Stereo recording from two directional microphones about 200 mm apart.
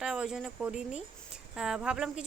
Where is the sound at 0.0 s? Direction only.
5° right (ahead or behind).